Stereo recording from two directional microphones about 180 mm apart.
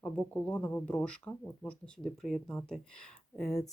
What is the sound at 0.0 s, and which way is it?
Speech, 5° left (ahead or behind).